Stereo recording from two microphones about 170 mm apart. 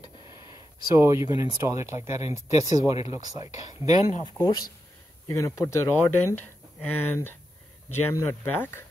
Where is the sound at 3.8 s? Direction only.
40° left (ahead or behind).